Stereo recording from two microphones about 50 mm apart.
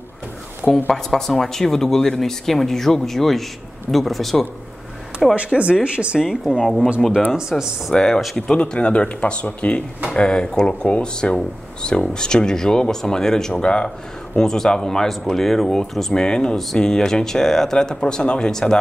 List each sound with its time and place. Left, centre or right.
0.8 s speech: centre
5.3 s speech: right
6.1 s speech: centre
7.3 s speech: centre
7.9 s speech: centre